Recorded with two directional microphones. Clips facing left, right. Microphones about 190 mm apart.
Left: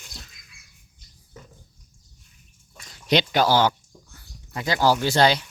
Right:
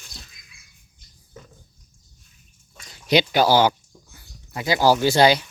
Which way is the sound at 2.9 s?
5° right (ahead or behind).